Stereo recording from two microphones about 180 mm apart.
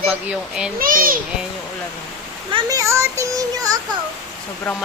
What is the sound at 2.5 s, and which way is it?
Speech, 20° right (ahead or behind).